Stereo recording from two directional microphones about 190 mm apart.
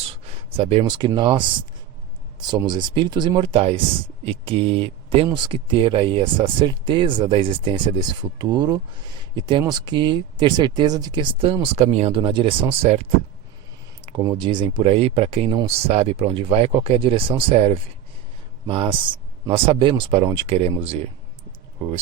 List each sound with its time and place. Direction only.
0.5 s speech: 30° right (ahead or behind)
14.0 s speech: 25° right (ahead or behind)